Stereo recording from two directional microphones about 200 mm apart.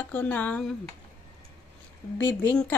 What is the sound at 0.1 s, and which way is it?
Speech, 10° left (ahead or behind).